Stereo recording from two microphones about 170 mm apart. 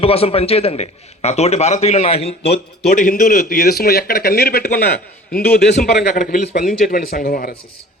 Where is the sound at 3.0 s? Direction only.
60° left (ahead or behind).